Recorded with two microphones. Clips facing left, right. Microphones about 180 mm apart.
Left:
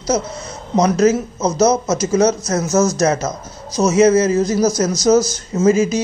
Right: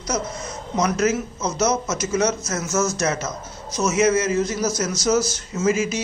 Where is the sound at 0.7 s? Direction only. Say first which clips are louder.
Left 7 dB; 35° left (ahead or behind).